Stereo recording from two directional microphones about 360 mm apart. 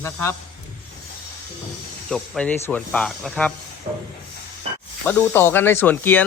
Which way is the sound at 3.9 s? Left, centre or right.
Centre.